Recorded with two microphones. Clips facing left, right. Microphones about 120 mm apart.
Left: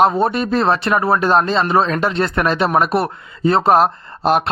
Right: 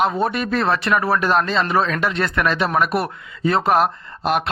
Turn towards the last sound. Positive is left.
turn(degrees=35)  # may be behind; listen again after turning